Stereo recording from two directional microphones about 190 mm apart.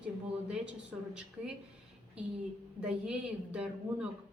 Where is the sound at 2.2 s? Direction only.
5° right (ahead or behind).